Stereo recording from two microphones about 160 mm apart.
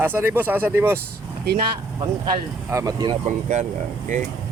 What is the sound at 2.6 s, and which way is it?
Speech, 20° right (ahead or behind).